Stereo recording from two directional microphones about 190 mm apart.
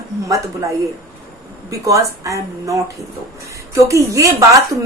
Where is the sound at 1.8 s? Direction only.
15° right (ahead or behind).